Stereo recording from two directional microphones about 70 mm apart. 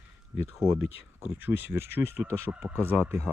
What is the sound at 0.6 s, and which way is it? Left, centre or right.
Speech, centre.